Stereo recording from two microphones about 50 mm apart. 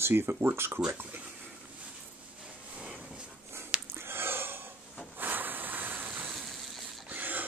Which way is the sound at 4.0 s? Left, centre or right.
Right.